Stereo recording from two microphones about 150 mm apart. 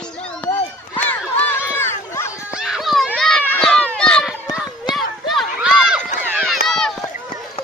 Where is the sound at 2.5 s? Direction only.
5° right (ahead or behind).